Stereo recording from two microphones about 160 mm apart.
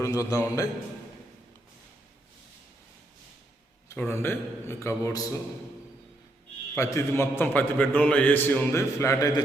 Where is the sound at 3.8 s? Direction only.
15° left (ahead or behind).